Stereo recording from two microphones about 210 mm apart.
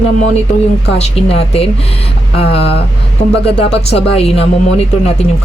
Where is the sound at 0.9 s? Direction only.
30° left (ahead or behind).